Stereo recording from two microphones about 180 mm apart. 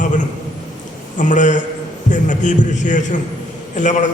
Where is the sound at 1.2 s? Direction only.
45° left (ahead or behind).